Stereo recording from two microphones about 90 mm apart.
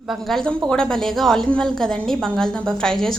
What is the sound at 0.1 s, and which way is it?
A woman's voice, 5° left (ahead or behind).